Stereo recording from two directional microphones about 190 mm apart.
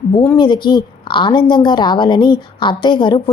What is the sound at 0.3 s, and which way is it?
A woman's voice, 25° left (ahead or behind).